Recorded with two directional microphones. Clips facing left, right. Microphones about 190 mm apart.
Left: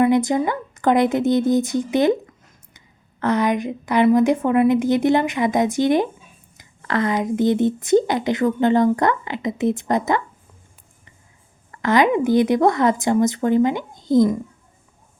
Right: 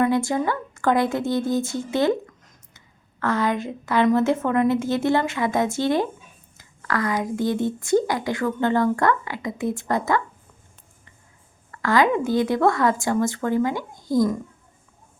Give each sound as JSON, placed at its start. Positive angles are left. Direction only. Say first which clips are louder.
{"t": 0.0, "sound": "a woman's voice", "louder": "left 4 dB", "side_deg": 20}
{"t": 11.7, "sound": "speech", "louder": "left 3 dB", "side_deg": 20}